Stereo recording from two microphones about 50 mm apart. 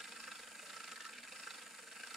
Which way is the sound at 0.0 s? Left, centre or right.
Centre.